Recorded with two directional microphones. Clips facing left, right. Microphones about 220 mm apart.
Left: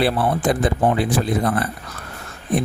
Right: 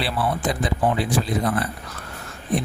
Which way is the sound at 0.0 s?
50° left (ahead or behind).